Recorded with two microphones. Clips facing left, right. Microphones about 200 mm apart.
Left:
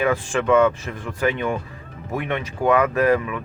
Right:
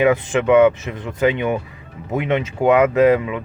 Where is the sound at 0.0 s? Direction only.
20° right (ahead or behind).